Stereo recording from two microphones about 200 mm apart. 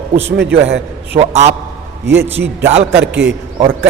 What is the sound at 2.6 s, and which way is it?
Speech, 30° right (ahead or behind).